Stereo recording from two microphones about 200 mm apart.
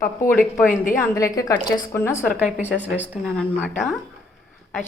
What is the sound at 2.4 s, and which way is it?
Speech, 5° right (ahead or behind).